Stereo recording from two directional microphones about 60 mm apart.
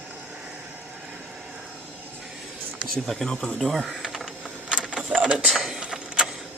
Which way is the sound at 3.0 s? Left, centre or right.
Centre.